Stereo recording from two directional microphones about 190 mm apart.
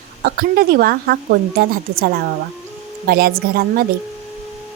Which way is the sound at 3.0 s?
55° right (ahead or behind).